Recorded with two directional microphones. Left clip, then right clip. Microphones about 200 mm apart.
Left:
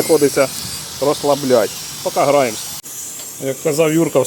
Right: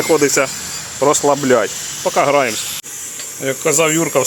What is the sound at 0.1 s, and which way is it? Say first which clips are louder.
Speech: even; 5° right (ahead or behind).